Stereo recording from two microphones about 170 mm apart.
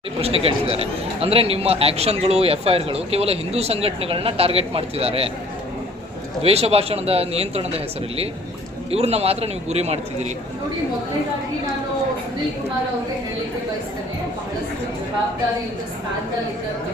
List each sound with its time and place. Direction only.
0.2 s a man's voice: 35° right (ahead or behind)
6.4 s a man's voice: 35° right (ahead or behind)
8.9 s a man's voice: 35° right (ahead or behind)